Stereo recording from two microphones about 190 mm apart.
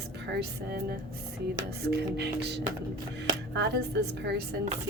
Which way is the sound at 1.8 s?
60° right (ahead or behind).